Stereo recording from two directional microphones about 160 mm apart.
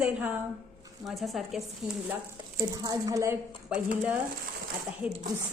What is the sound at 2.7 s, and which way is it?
Speech, 20° right (ahead or behind).